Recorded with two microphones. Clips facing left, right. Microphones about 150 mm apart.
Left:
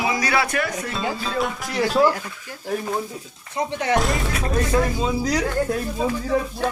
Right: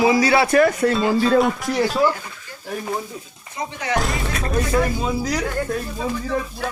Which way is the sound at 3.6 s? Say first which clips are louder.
Left 3 dB; 65° left (ahead or behind).